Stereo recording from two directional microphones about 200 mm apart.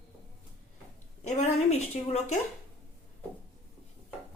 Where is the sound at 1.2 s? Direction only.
35° left (ahead or behind).